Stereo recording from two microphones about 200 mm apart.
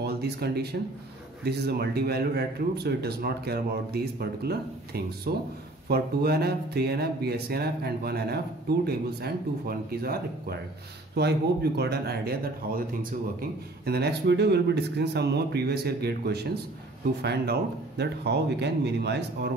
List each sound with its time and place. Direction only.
0.0 s speech: 55° right (ahead or behind)